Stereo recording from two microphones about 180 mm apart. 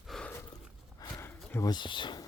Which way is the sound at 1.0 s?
20° left (ahead or behind).